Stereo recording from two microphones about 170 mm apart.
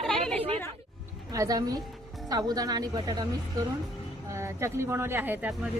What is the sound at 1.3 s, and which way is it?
A woman's voice, 20° right (ahead or behind).